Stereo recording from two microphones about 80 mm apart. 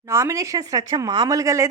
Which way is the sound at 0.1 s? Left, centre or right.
Right.